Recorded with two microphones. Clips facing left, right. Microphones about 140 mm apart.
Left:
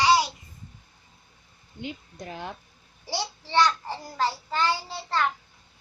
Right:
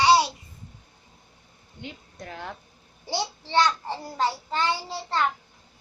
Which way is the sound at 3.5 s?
25° right (ahead or behind).